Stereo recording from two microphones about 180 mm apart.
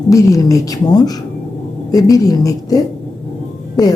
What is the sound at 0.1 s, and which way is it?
A woman's voice, 20° left (ahead or behind).